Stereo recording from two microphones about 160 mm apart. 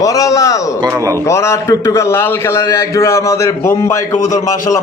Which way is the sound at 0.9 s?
20° right (ahead or behind).